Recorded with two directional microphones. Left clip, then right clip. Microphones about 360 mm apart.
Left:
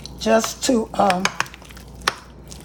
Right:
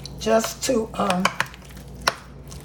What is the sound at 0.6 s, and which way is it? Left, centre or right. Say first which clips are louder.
Speech: left 4 dB; left.